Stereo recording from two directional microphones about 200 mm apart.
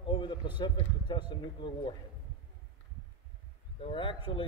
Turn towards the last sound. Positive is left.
turn(degrees=25)  # may be behind; listen again after turning